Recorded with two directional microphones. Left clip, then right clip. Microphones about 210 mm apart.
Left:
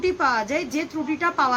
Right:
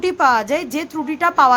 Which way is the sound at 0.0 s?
55° right (ahead or behind).